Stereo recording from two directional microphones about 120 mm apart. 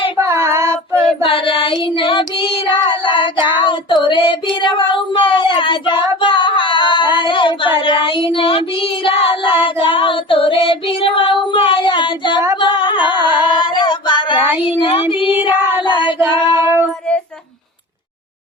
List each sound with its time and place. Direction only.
0.2 s child singing: 20° right (ahead or behind)
1.2 s child singing: 45° left (ahead or behind)
4.0 s female singing: 45° left (ahead or behind)
4.6 s child singing: 40° left (ahead or behind)
12.5 s singing: 40° left (ahead or behind)
14.3 s child singing: 15° right (ahead or behind)
14.8 s child singing: 45° left (ahead or behind)
15.3 s child singing: 15° right (ahead or behind)
15.8 s child singing: 40° left (ahead or behind)
16.6 s child singing: 20° right (ahead or behind)